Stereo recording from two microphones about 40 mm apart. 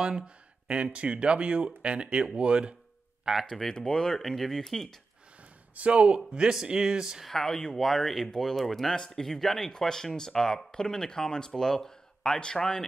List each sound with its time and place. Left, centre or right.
0.2 s a sound: right
0.9 s speech: right
3.4 s speech: centre
5.8 s speech: right
7.2 s speech: centre